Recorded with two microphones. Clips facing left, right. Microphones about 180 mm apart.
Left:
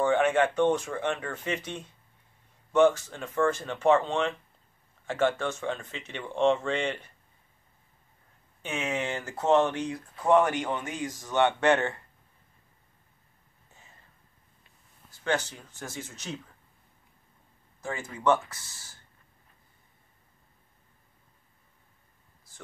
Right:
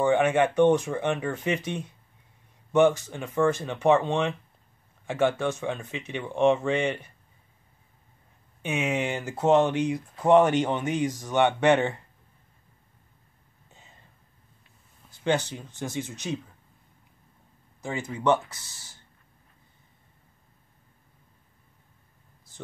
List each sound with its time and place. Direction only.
0.0 s speech: 15° right (ahead or behind)
8.6 s speech: 15° right (ahead or behind)
15.2 s speech: 20° right (ahead or behind)
17.8 s speech: 20° right (ahead or behind)